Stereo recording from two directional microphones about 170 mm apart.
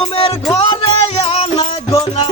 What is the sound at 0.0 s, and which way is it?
Music, 35° left (ahead or behind).